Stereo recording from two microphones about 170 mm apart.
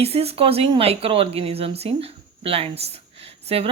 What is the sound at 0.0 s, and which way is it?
A woman's voice, 35° right (ahead or behind).